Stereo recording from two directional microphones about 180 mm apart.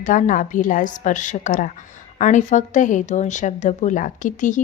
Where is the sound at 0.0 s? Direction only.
45° left (ahead or behind).